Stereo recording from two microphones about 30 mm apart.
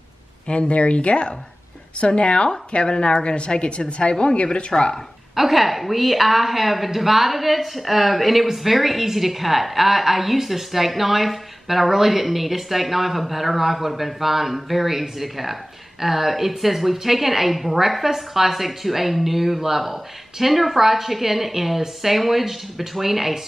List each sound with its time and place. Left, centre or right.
0.5 s a woman's voice: left
5.3 s a woman's voice: centre